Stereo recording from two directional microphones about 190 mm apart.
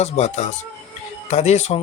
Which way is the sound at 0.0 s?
35° left (ahead or behind).